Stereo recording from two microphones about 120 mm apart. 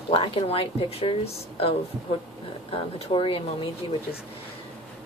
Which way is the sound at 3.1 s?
50° left (ahead or behind).